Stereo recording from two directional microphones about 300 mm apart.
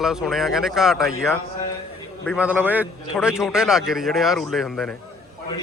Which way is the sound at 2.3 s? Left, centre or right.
Centre.